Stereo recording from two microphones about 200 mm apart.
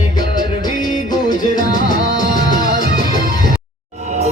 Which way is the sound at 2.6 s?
50° right (ahead or behind).